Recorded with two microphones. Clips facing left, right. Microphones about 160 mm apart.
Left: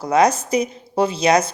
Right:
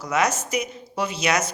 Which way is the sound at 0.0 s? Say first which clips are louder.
Left 7 dB; 35° left (ahead or behind).